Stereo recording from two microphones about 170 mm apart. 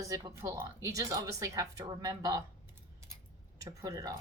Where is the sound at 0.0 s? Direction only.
20° right (ahead or behind).